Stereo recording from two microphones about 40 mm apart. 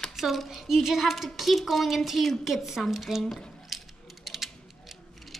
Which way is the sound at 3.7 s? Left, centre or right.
Centre.